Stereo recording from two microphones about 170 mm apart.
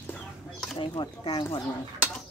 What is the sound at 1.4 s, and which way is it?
Dishes, 20° left (ahead or behind).